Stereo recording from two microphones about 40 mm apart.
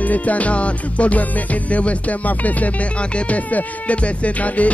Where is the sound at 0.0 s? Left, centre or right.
Left.